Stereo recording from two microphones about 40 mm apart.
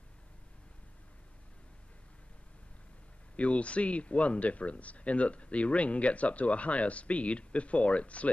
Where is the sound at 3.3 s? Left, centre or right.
Left.